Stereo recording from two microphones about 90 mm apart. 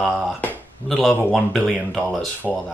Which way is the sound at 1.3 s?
Centre (ahead or behind).